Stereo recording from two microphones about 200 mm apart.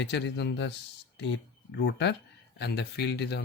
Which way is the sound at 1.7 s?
60° left (ahead or behind).